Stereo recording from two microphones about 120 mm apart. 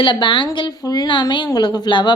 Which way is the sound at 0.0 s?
40° left (ahead or behind).